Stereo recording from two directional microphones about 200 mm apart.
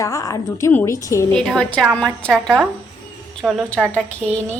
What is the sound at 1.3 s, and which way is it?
A woman's voice, 5° left (ahead or behind).